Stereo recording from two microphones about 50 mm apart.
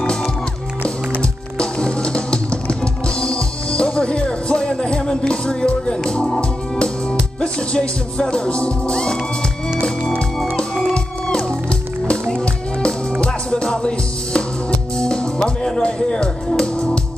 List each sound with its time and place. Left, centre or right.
1.6 s music: centre
12.8 s music: centre